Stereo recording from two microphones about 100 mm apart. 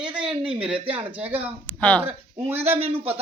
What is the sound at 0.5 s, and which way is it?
Speech, 65° right (ahead or behind).